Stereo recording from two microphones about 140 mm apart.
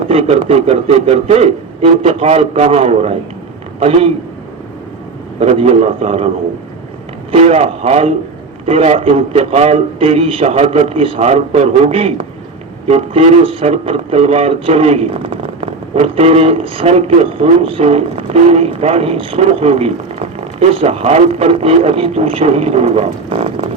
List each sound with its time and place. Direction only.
0.0 s speech: 45° right (ahead or behind)
5.4 s speech: 45° right (ahead or behind)